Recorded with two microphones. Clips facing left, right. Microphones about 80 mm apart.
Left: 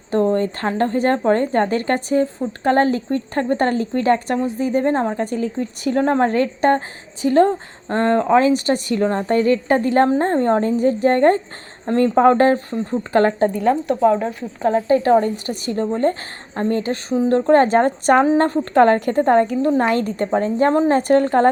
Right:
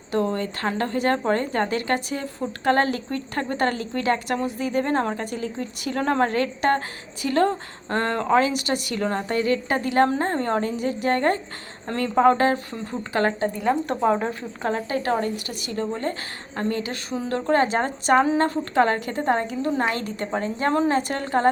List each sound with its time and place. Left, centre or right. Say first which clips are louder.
0.1 s a woman's voice: left 6 dB; left
5.2 s a woman's voice: left 7 dB; left
14.0 s speech: left 6 dB; centre
14.6 s a woman's voice: left 9 dB; left